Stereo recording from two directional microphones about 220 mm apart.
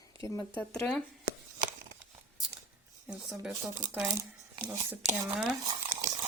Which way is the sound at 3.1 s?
5° right (ahead or behind).